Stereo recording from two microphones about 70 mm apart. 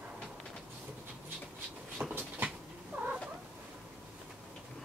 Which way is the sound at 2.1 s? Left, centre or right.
Right.